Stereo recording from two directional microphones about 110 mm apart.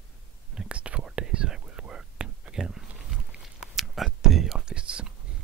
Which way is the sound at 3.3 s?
5° right (ahead or behind).